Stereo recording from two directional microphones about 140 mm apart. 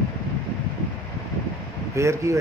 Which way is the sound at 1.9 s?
20° right (ahead or behind).